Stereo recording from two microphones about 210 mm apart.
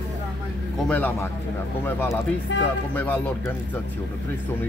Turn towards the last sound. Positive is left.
turn(degrees=10)  # may be behind; listen again after turning